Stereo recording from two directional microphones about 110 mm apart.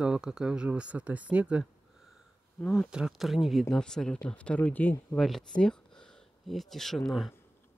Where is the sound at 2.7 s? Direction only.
5° right (ahead or behind); by 4.9 s 15° left (ahead or behind).